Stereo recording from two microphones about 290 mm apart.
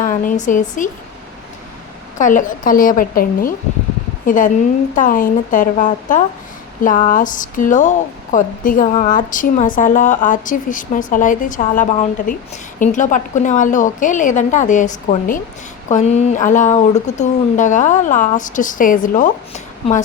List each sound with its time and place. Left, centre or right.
0.0 s speech: left
2.1 s speech: left